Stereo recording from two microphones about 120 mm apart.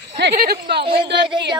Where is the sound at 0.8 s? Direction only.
45° right (ahead or behind).